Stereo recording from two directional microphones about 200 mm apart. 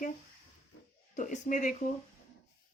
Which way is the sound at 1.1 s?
40° left (ahead or behind).